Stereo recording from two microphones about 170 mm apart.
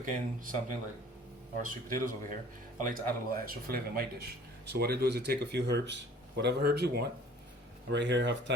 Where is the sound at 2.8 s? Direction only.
60° right (ahead or behind).